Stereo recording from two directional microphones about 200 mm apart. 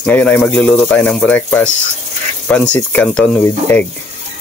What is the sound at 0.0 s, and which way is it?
Speech, 5° left (ahead or behind).